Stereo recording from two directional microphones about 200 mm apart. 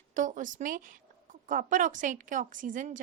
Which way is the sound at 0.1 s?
40° right (ahead or behind).